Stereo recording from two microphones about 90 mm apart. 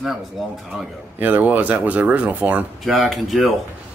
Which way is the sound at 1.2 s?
20° right (ahead or behind).